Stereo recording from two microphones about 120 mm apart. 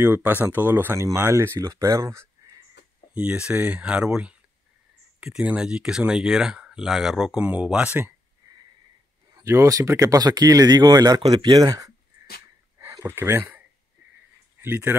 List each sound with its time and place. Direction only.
0.0 s speech: 15° right (ahead or behind)
3.2 s speech: 10° right (ahead or behind)
9.4 s speech: 25° right (ahead or behind)
12.7 s a sound: 20° right (ahead or behind)
14.6 s speech: 20° right (ahead or behind)